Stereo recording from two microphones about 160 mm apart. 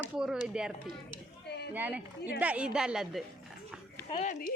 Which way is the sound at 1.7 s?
10° right (ahead or behind).